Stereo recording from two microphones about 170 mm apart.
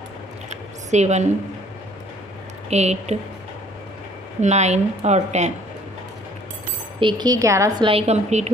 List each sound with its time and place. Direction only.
0.5 s a sound: 45° right (ahead or behind)
2.7 s a woman's voice: 40° right (ahead or behind)
4.4 s a woman's voice: 40° right (ahead or behind)
7.0 s speech: 25° right (ahead or behind)
7.8 s a woman's voice: 35° right (ahead or behind)